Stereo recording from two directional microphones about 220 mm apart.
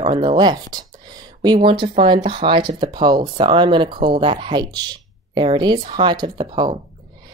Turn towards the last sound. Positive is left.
turn(degrees=-20)  # may be behind; listen again after turning